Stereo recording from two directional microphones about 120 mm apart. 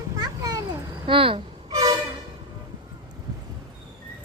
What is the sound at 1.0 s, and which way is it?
Speech, 50° right (ahead or behind).